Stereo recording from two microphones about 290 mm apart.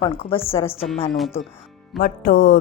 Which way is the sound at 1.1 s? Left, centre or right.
Centre.